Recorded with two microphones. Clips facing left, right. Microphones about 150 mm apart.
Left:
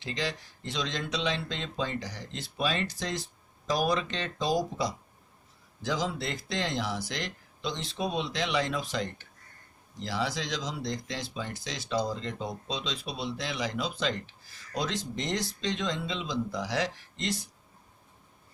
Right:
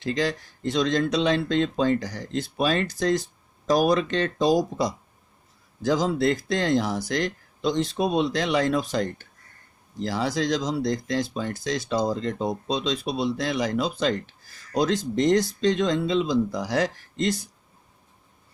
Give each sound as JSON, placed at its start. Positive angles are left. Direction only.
{"t": 0.0, "sound": "speech", "side_deg": -45}